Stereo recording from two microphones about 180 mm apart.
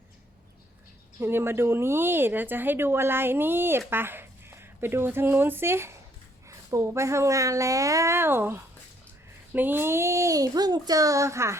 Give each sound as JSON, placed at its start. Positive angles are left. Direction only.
{"t": 1.2, "sound": "speech", "side_deg": -15}